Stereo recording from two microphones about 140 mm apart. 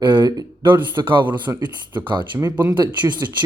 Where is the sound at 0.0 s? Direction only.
35° right (ahead or behind).